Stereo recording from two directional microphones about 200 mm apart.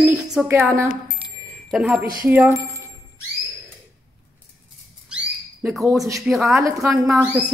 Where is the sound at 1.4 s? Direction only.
5° right (ahead or behind).